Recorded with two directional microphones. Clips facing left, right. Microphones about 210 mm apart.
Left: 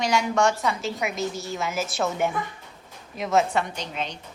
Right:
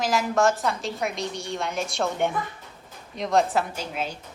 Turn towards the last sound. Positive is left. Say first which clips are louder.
# right 1 dB
turn(degrees=-5)  # may be behind; listen again after turning